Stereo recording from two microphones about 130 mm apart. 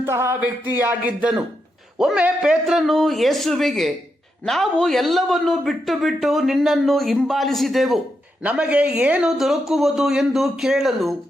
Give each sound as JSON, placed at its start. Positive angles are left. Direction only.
{"t": 0.0, "sound": "speech", "side_deg": -20}
{"t": 1.2, "sound": "a man's voice", "side_deg": -5}